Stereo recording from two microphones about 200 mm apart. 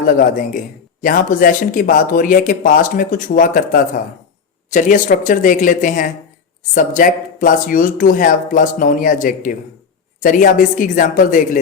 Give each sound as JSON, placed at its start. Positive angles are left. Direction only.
{"t": 0.0, "sound": "a woman's voice", "side_deg": 40}